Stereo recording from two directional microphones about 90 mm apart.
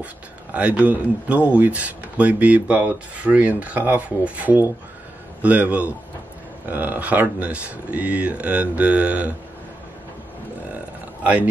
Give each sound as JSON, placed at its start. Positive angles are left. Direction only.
{"t": 0.0, "sound": "speech", "side_deg": -15}